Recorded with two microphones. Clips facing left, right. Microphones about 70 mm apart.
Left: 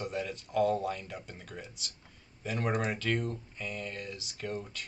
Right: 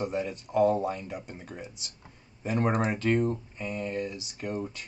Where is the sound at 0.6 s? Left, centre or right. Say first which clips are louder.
Right 4 dB; right.